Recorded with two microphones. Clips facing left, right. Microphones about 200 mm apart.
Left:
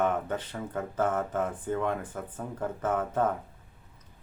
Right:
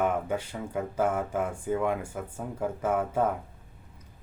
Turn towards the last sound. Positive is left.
turn(degrees=-10)  # may be behind; listen again after turning